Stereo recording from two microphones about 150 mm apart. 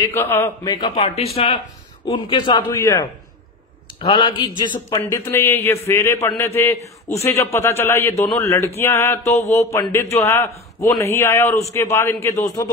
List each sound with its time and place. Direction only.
0.0 s a man's voice: 15° left (ahead or behind)
0.7 s a man's voice: 30° left (ahead or behind)
2.7 s speech: 20° left (ahead or behind)
4.0 s a man's voice: 35° left (ahead or behind)
4.8 s a man's voice: 20° left (ahead or behind)